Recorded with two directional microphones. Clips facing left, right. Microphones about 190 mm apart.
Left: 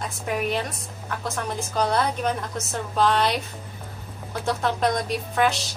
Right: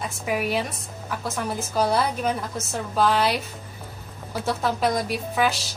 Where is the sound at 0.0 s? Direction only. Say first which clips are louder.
Right 1 dB; 5° right (ahead or behind).